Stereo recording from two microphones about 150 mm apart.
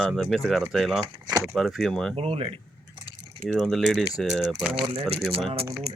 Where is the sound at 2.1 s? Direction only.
40° right (ahead or behind).